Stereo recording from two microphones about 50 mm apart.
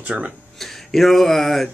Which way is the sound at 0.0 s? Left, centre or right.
Right.